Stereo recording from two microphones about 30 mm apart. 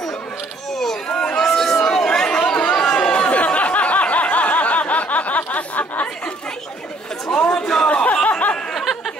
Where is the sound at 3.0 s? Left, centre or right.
Left.